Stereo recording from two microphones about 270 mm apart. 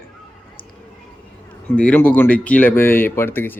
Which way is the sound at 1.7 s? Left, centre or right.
Centre.